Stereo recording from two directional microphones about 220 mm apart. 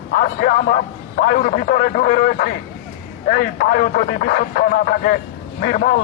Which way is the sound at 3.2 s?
40° left (ahead or behind).